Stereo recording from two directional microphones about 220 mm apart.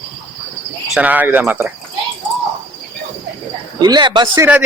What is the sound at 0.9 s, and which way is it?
Speech, 5° right (ahead or behind).